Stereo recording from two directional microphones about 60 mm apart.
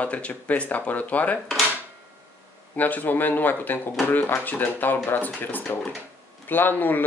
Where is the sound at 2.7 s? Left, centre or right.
Left.